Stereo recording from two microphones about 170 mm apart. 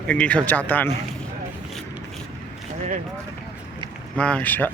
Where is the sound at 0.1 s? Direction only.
5° left (ahead or behind).